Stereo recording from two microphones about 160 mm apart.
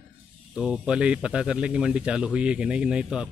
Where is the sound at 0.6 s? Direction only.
5° right (ahead or behind).